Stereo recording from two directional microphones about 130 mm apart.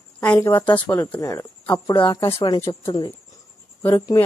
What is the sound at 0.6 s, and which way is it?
Speech, 35° left (ahead or behind).